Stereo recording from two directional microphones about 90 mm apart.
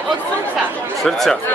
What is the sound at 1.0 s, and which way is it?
Speech, centre (ahead or behind).